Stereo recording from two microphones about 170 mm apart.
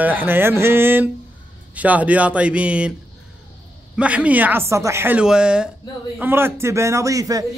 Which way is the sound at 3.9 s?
5° right (ahead or behind).